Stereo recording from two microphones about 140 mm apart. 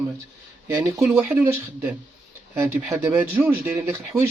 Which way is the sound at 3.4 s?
15° right (ahead or behind).